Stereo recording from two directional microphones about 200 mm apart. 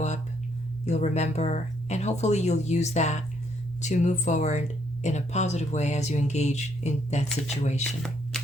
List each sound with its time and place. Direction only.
0.9 s speech: 35° left (ahead or behind)